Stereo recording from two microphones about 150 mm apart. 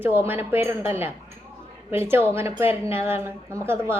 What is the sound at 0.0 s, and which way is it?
A woman's voice, 15° right (ahead or behind).